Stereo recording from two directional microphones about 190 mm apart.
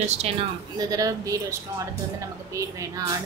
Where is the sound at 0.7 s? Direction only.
20° right (ahead or behind).